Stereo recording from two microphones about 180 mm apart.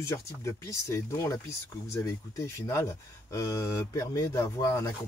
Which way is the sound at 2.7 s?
15° left (ahead or behind).